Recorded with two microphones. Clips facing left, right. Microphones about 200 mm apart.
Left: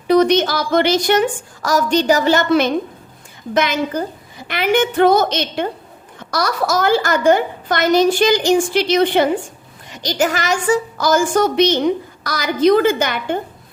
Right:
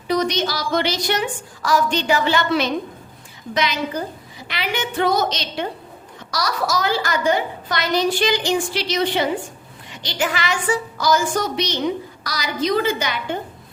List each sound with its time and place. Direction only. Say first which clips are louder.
0.1 s a child's voice: left 8 dB; 55° left (ahead or behind)
9.9 s a child's voice: left 6 dB; 40° left (ahead or behind)